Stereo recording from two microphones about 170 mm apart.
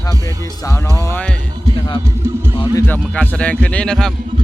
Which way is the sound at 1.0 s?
15° left (ahead or behind).